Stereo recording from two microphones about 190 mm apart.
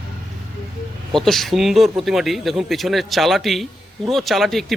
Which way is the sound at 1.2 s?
Centre (ahead or behind).